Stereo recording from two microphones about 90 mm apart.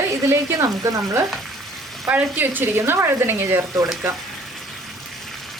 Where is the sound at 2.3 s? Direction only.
20° right (ahead or behind).